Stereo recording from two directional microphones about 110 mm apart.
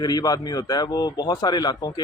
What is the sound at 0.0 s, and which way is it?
A man's voice, 35° left (ahead or behind).